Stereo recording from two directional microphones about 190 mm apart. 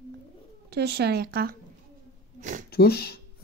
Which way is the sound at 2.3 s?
40° right (ahead or behind).